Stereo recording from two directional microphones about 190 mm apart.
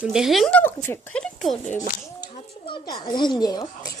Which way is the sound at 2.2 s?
25° left (ahead or behind).